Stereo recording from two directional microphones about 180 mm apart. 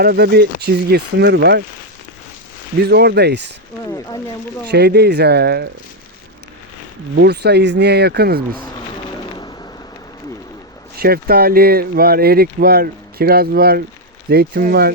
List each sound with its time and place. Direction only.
0.0 s speech: 60° right (ahead or behind)
2.8 s speech: 65° right (ahead or behind)
4.7 s speech: 65° right (ahead or behind)
7.2 s speech: 70° right (ahead or behind)
10.9 s speech: 60° right (ahead or behind)